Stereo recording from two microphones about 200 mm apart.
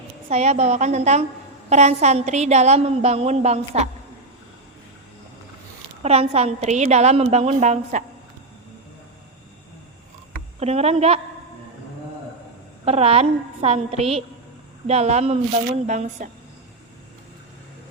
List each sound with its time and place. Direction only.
0.3 s a woman's voice: 35° right (ahead or behind)
6.0 s a woman's voice: 30° right (ahead or behind)
10.6 s a woman's voice: 30° right (ahead or behind)
12.8 s a woman's voice: 30° right (ahead or behind)